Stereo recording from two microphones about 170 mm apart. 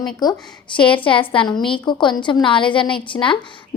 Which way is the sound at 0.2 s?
25° left (ahead or behind).